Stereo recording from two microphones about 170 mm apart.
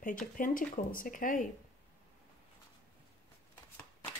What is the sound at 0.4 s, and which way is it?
Speech, 55° left (ahead or behind).